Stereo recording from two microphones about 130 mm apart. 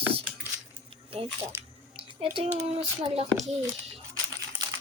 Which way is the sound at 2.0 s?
45° right (ahead or behind).